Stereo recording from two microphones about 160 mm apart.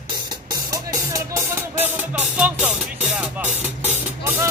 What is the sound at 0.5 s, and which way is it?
Music, 20° right (ahead or behind).